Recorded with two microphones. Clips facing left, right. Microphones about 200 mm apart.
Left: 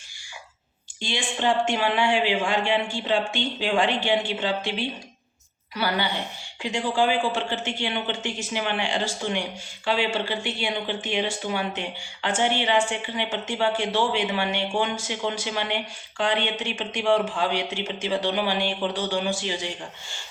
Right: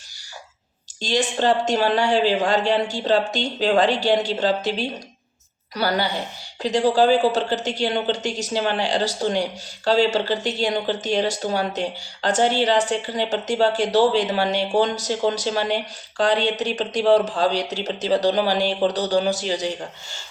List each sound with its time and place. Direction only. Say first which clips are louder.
1.0 s speech: right 5 dB; 40° right (ahead or behind)
5.7 s speech: right 4 dB; 40° right (ahead or behind)